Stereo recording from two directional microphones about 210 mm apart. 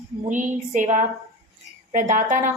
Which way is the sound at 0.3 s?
35° right (ahead or behind).